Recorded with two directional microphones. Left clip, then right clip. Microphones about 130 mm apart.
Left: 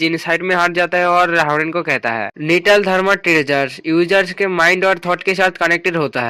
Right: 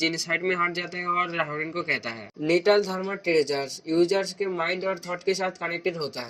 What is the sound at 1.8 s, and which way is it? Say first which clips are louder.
Speech: left 11 dB; 30° left (ahead or behind).